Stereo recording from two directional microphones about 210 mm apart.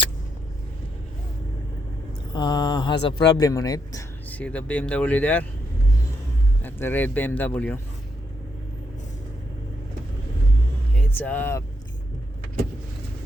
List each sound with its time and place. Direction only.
2.3 s a man's voice: 20° left (ahead or behind)
6.6 s a man's voice: 10° left (ahead or behind)
10.9 s speech: 5° left (ahead or behind)